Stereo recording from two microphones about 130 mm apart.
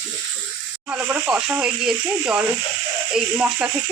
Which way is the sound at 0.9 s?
15° right (ahead or behind).